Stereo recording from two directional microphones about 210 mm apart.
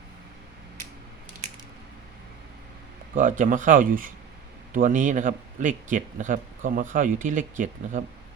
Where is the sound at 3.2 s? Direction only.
35° right (ahead or behind).